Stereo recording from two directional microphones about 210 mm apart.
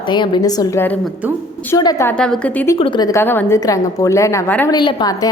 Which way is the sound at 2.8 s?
20° left (ahead or behind).